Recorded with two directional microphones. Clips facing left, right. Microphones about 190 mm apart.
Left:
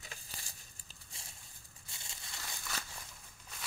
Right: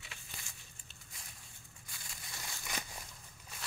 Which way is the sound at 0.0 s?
40° left (ahead or behind).